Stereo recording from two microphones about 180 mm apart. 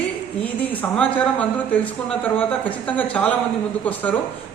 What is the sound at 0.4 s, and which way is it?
Speech, 10° left (ahead or behind).